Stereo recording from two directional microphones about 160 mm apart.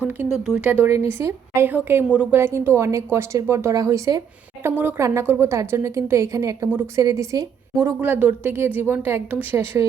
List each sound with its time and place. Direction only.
0.4 s speech: 10° right (ahead or behind)